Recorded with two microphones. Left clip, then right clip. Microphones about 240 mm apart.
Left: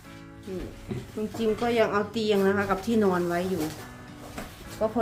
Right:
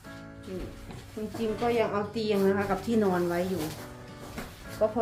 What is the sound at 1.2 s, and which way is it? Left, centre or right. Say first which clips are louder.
Speech: left 3 dB; left.